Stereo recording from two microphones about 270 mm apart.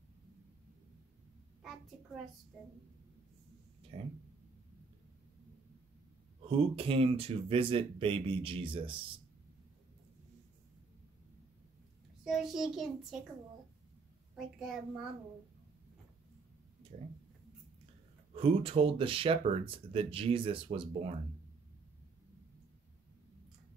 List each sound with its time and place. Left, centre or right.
3.9 s speech: right
6.4 s speech: right
12.3 s a child's voice: centre
14.3 s a child's voice: centre
16.9 s speech: right
18.3 s speech: right